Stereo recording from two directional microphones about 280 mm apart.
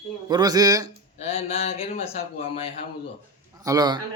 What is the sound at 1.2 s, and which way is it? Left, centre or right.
A man's voice, left.